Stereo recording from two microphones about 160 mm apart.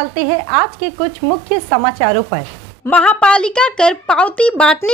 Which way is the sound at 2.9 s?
10° left (ahead or behind).